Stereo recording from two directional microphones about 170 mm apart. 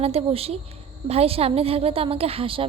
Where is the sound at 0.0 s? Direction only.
35° right (ahead or behind).